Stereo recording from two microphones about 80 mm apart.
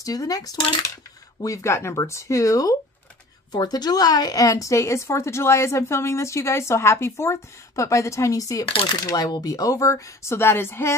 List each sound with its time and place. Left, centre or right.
0.0 s speech: left
1.4 s a woman's voice: left
3.5 s a woman's voice: left